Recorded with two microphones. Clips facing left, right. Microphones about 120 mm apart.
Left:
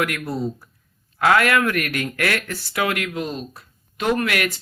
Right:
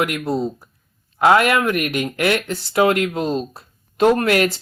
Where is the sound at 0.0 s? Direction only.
20° right (ahead or behind).